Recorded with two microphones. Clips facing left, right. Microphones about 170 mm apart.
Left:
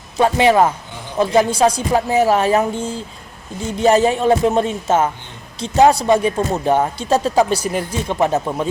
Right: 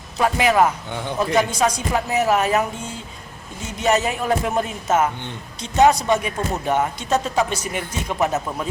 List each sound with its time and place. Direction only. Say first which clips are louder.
0.2 s speech: left 4 dB; 30° left (ahead or behind)